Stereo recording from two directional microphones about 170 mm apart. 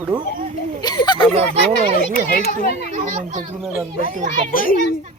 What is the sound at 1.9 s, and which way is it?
Speech, 60° left (ahead or behind).